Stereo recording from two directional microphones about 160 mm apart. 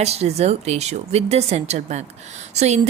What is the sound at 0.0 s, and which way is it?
Speech, 40° right (ahead or behind).